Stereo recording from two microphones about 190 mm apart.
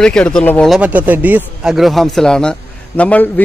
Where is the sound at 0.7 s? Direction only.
5° right (ahead or behind).